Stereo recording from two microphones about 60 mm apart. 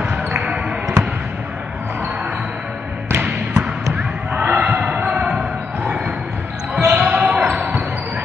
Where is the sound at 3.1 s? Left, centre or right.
Right.